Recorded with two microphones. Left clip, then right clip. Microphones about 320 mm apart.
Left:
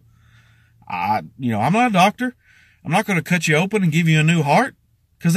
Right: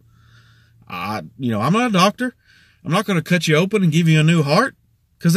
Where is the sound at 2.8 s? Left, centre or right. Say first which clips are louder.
Even; centre.